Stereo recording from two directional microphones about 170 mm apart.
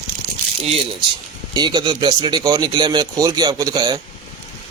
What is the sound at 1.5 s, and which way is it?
A man's voice, 25° right (ahead or behind).